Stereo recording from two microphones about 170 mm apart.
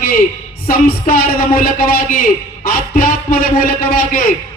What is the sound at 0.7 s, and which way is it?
A man's voice, 55° left (ahead or behind).